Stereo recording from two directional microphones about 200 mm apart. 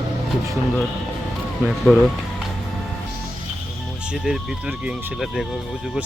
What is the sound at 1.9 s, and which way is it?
Speech, 5° right (ahead or behind).